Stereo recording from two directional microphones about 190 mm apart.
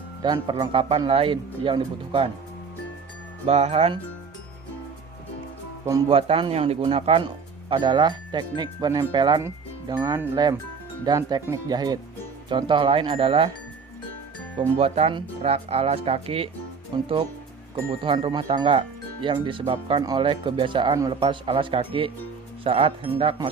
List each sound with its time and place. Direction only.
0.2 s speech: 25° right (ahead or behind)
3.4 s speech: 35° right (ahead or behind)
6.1 s speech: 30° right (ahead or behind)
14.8 s speech: 30° right (ahead or behind)